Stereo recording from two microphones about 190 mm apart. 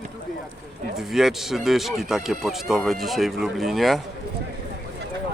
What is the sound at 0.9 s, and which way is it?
Speech, centre (ahead or behind).